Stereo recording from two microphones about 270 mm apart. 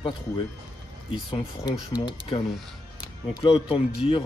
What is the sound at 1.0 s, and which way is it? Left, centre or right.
Speech, centre.